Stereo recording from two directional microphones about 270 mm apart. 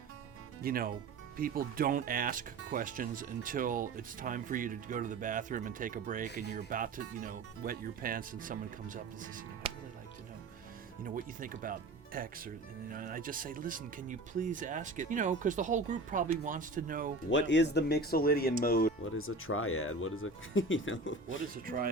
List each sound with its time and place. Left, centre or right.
0.6 s speech: right
11.0 s speech: right
17.3 s speech: left
19.1 s speech: left
21.5 s speech: right